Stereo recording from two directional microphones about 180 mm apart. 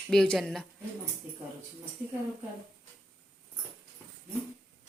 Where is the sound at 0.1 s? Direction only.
5° left (ahead or behind).